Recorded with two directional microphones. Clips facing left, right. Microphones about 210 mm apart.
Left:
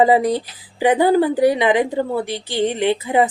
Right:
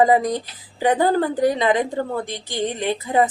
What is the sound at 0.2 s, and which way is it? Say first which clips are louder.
Speech: left 4 dB; 15° right (ahead or behind).